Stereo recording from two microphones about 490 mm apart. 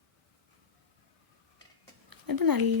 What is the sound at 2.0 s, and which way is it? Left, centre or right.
Speech, right.